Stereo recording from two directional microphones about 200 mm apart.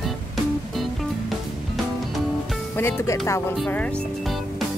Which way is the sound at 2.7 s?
15° left (ahead or behind).